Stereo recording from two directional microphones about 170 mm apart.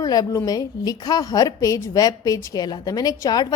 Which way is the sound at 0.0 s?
20° left (ahead or behind).